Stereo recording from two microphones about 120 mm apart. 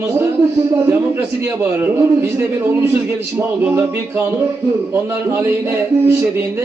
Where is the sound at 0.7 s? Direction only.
20° right (ahead or behind).